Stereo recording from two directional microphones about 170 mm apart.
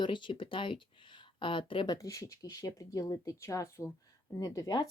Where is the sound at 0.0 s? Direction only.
30° left (ahead or behind).